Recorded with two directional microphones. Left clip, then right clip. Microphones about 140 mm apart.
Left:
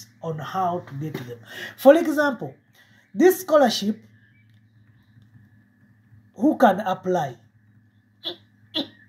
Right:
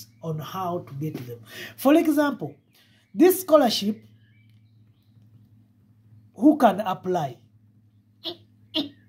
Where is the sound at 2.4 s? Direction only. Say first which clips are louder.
Even; 55° right (ahead or behind).